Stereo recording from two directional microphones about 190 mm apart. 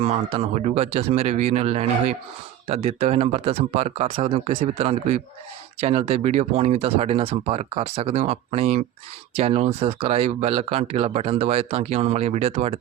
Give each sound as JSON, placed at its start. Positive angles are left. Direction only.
{"t": 0.0, "sound": "speech", "side_deg": -30}